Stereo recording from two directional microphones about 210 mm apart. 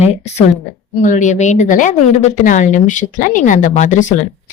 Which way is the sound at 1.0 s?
35° left (ahead or behind).